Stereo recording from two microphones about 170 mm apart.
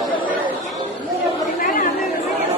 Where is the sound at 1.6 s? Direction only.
55° left (ahead or behind).